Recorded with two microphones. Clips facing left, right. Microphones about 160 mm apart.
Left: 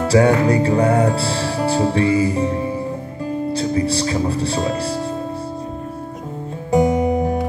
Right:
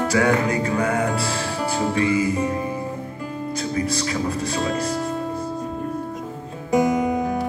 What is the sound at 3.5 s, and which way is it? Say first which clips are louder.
Speech: left 4 dB; 30° left (ahead or behind).